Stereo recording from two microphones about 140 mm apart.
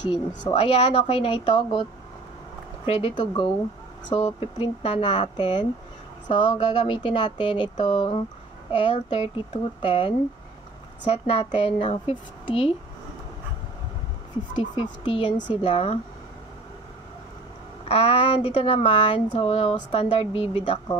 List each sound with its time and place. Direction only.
0.4 s speech: 35° left (ahead or behind)
2.9 s speech: 40° left (ahead or behind)
14.5 s speech: 40° left (ahead or behind)
17.8 s speech: 40° left (ahead or behind)